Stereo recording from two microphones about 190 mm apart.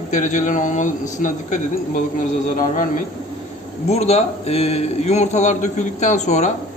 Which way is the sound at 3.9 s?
35° left (ahead or behind).